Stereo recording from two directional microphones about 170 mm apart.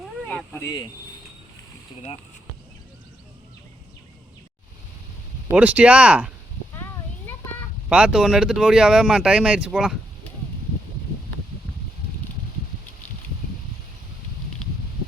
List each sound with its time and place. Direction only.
0.3 s a sound: 5° left (ahead or behind)
0.6 s speech: 20° left (ahead or behind)
5.5 s speech: 10° right (ahead or behind)
7.9 s speech: 5° right (ahead or behind)